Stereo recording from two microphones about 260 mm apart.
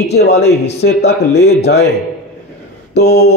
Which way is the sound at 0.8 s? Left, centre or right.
Left.